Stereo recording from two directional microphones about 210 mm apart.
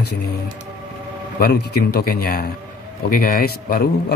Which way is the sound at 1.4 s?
50° left (ahead or behind).